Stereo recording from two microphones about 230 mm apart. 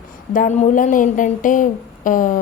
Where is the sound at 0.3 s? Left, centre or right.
Left.